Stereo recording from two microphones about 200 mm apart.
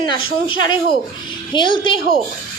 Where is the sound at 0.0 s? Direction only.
25° left (ahead or behind).